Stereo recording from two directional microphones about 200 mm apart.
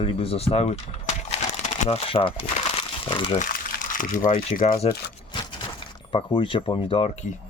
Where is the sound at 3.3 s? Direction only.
40° left (ahead or behind).